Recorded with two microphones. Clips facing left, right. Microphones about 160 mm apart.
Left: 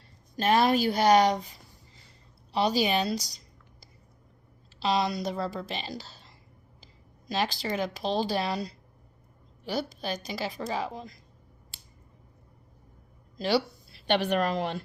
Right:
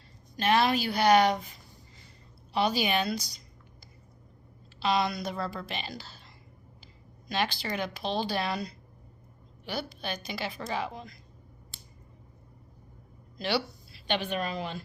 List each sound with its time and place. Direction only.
0.3 s a woman's voice: 40° left (ahead or behind)
2.5 s a woman's voice: 35° left (ahead or behind)
4.8 s a woman's voice: 35° left (ahead or behind)
14.1 s a woman's voice: 70° left (ahead or behind)